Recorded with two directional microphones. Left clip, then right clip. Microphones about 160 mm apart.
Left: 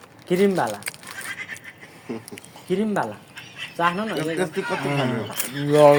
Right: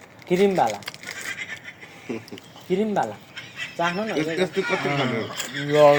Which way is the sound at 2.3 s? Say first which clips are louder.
Even; 60° left (ahead or behind).